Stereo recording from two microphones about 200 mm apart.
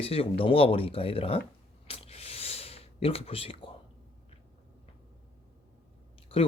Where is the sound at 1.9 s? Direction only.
30° left (ahead or behind).